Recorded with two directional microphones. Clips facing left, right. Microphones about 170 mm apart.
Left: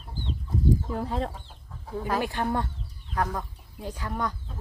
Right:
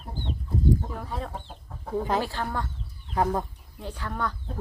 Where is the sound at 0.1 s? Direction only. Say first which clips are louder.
Right 1 dB; 55° right (ahead or behind).